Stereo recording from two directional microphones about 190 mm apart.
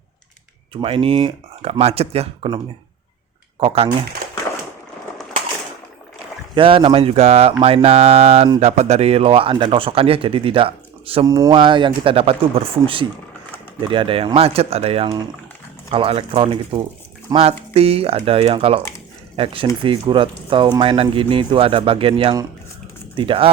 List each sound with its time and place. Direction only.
0.7 s speech: 30° right (ahead or behind)
3.6 s speech: 30° right (ahead or behind)
6.5 s speech: 25° right (ahead or behind)
17.3 s speech: 20° right (ahead or behind)
17.7 s speech: 30° right (ahead or behind)